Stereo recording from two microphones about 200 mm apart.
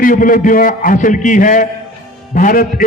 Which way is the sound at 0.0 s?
45° left (ahead or behind).